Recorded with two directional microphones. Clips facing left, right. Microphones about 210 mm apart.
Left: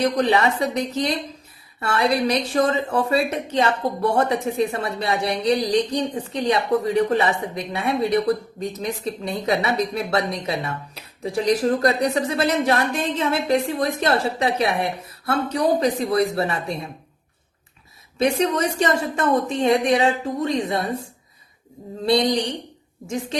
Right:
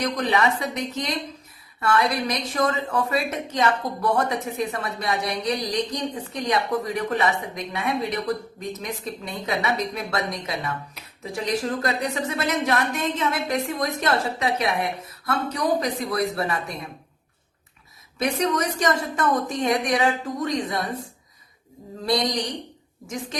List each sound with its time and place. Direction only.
0.0 s a woman's voice: 30° left (ahead or behind)
18.2 s speech: 30° left (ahead or behind)
22.0 s speech: 30° left (ahead or behind)